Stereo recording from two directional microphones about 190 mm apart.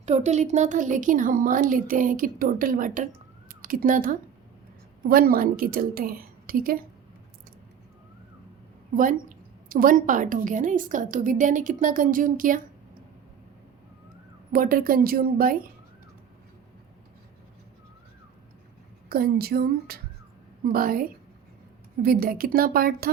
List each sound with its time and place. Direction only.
0.0 s a woman's voice: 35° right (ahead or behind)
9.6 s a woman's voice: 45° right (ahead or behind)
14.5 s a woman's voice: 50° right (ahead or behind)
19.0 s a woman's voice: 50° right (ahead or behind)